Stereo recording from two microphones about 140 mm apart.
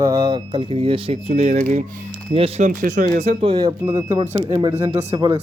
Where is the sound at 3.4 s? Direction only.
30° right (ahead or behind).